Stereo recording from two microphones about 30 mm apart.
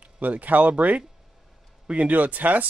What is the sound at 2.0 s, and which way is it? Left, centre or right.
Speech, right.